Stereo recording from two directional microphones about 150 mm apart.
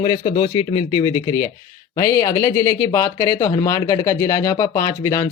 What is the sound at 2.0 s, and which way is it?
Speech, 20° left (ahead or behind).